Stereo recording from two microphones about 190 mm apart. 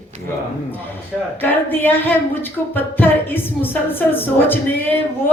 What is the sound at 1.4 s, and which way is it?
A woman's voice, 10° left (ahead or behind).